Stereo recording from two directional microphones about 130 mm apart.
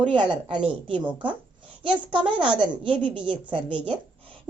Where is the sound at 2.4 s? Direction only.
40° right (ahead or behind).